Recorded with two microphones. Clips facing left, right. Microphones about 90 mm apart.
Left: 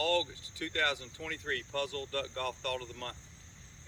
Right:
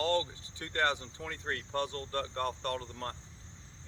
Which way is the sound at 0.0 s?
30° right (ahead or behind).